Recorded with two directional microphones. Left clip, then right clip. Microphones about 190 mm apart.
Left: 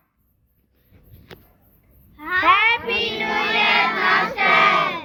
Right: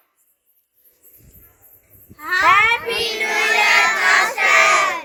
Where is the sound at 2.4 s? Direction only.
30° right (ahead or behind).